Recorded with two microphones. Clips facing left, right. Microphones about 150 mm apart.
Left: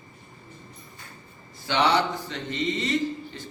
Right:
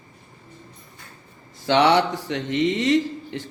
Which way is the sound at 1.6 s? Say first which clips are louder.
Right 5 dB; 75° right (ahead or behind).